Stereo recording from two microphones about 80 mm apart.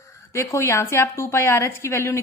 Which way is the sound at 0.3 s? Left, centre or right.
Left.